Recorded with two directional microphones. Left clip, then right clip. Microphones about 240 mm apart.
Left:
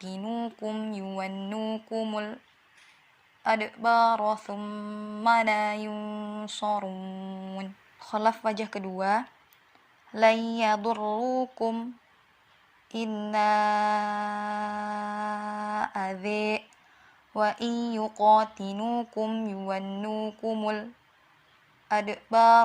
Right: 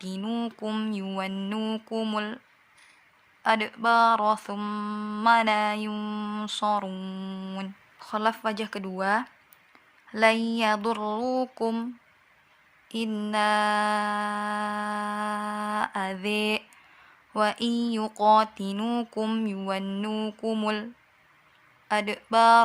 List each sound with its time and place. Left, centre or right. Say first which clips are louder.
0.0 s mantra: right 1 dB; centre
3.4 s mantra: right 1 dB; centre
12.9 s mantra: right 1 dB; centre
21.8 s mantra: right 1 dB; centre